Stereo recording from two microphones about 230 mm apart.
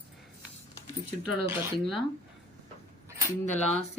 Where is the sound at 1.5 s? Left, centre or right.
Centre.